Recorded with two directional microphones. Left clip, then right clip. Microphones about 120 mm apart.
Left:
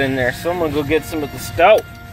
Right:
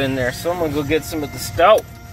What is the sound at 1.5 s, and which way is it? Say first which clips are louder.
Speech: left 1 dB; 10° left (ahead or behind).